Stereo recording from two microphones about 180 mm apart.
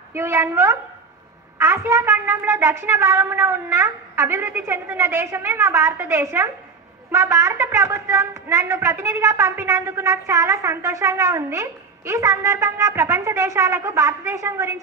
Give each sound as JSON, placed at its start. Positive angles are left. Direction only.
{"t": 0.1, "sound": "a woman's voice", "side_deg": -15}